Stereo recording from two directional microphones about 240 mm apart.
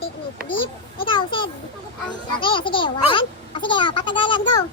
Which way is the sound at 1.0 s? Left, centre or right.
Left.